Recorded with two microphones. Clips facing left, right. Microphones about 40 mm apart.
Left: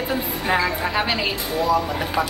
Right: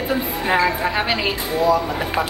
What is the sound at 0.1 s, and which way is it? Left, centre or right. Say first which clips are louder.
A woman's voice: right 3 dB; centre.